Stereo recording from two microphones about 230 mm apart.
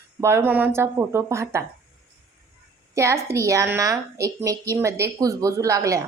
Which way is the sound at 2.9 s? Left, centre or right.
Centre.